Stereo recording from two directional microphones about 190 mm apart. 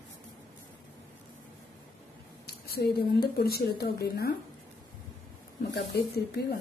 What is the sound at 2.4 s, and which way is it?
Speech, 55° left (ahead or behind).